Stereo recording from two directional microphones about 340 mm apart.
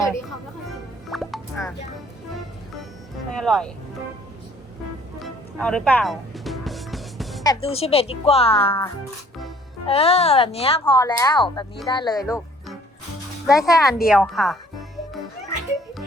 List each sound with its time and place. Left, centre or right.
0.7 s music: centre
3.3 s speech: centre
5.2 s music: centre
7.4 s speech: centre
12.1 s speech: centre